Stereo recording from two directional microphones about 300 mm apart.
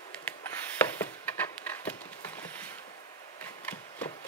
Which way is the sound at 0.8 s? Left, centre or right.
Centre.